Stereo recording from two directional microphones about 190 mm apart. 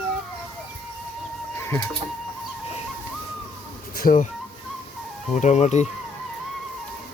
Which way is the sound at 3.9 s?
45° left (ahead or behind).